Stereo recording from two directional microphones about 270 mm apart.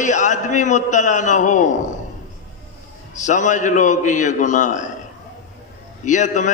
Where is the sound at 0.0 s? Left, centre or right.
Left.